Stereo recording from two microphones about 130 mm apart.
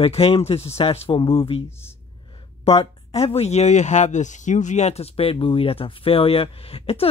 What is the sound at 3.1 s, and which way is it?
Speech, 50° left (ahead or behind).